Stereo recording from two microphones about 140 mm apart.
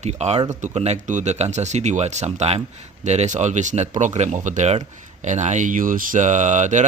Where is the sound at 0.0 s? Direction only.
50° right (ahead or behind).